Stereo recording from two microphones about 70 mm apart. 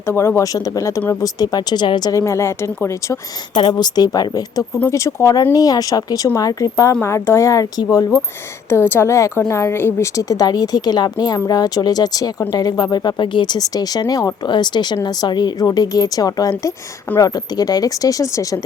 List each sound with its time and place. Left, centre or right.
0.0 s a woman's voice: left
0.4 s speech: left
1.2 s speech: left
2.1 s speech: left
3.7 s speech: left
4.9 s speech: left
5.5 s speech: left
7.0 s speech: left
7.8 s speech: left
8.7 s a woman's voice: left
10.0 s speech: left
14.1 s speech: left
14.4 s speech: left